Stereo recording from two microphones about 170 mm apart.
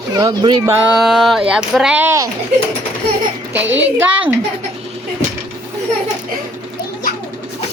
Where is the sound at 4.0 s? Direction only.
10° right (ahead or behind).